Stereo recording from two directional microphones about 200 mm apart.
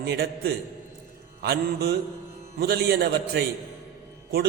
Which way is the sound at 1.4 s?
50° right (ahead or behind).